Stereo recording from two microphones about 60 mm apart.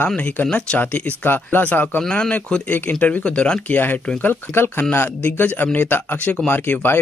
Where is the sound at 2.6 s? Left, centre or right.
Left.